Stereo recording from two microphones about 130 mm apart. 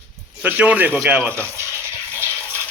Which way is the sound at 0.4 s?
10° right (ahead or behind).